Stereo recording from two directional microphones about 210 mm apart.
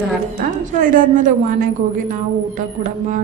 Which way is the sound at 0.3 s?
40° right (ahead or behind).